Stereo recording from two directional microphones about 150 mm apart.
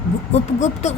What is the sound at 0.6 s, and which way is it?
Speech, 50° left (ahead or behind).